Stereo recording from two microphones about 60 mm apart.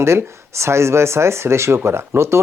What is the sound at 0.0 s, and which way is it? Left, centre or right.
Speech, right.